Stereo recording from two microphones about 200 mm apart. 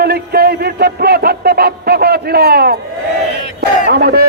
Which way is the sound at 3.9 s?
55° right (ahead or behind).